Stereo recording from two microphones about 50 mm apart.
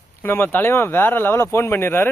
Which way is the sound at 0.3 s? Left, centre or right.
Left.